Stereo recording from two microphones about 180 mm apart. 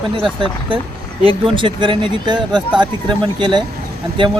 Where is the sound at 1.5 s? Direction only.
25° right (ahead or behind).